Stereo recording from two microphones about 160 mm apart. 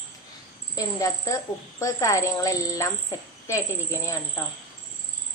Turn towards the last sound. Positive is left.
turn(degrees=20)  # may be behind; listen again after turning